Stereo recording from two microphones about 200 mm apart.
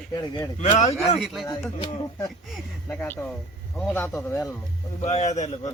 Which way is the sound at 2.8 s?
10° left (ahead or behind).